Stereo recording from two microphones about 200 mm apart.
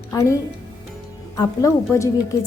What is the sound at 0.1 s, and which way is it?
Speech, 15° left (ahead or behind).